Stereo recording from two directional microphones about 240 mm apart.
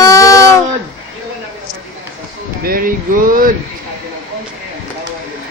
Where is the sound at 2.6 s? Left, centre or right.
Right.